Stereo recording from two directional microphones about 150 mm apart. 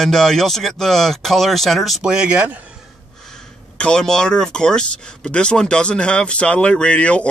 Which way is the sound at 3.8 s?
5° left (ahead or behind).